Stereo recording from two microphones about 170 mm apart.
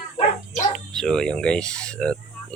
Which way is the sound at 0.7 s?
5° left (ahead or behind).